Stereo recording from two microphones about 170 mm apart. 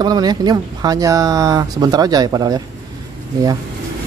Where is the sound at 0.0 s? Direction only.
25° right (ahead or behind).